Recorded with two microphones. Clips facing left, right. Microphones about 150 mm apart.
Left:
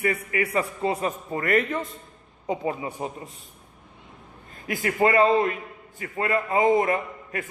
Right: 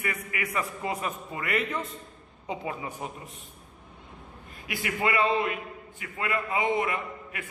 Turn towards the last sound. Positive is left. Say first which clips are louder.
# left 5 dB
turn(degrees=40)  # may be behind; listen again after turning